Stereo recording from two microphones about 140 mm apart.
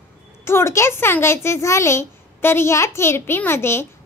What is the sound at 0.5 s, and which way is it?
Speech, 20° left (ahead or behind).